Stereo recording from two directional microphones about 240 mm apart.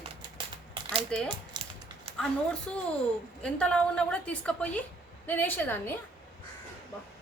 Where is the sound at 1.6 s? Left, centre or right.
Centre.